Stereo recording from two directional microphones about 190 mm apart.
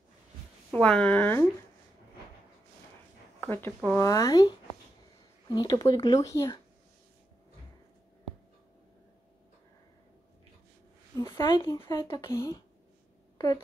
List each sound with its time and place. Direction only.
0.7 s speech: 5° left (ahead or behind)
3.3 s speech: 10° left (ahead or behind)
11.2 s speech: 25° left (ahead or behind)